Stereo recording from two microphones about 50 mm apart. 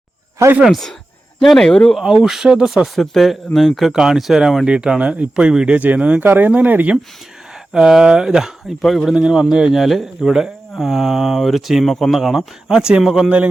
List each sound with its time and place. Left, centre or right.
0.4 s speech: right
1.4 s speech: centre
2.0 s speech: centre
3.9 s speech: centre; by 6.8 s right
7.7 s speech: centre
8.8 s speech: centre
9.1 s speech: centre
9.7 s speech: centre
12.2 s speech: centre
13.2 s speech: right